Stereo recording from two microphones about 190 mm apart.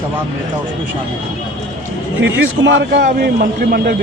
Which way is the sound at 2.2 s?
75° right (ahead or behind).